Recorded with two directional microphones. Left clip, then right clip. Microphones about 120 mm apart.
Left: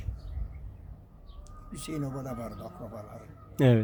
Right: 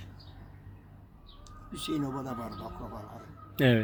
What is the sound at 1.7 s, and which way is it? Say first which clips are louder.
Speech: right 3 dB; 25° left (ahead or behind).